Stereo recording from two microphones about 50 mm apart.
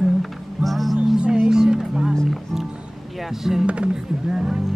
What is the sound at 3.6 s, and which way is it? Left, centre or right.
Speech, right.